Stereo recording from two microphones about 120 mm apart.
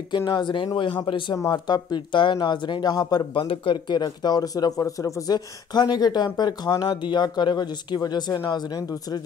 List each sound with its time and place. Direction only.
0.3 s a man's voice: 40° left (ahead or behind)